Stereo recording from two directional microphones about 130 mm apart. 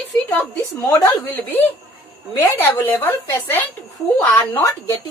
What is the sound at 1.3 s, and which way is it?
A woman's voice, 15° left (ahead or behind).